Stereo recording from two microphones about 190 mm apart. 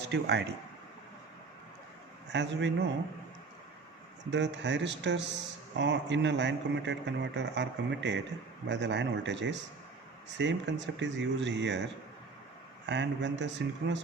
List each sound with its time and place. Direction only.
0.0 s speech: 60° right (ahead or behind)
2.3 s speech: 70° right (ahead or behind)
4.3 s speech: 70° right (ahead or behind)
12.8 s speech: 70° right (ahead or behind)